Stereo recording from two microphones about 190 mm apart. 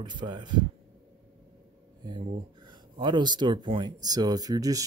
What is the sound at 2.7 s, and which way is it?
Speech, 25° right (ahead or behind).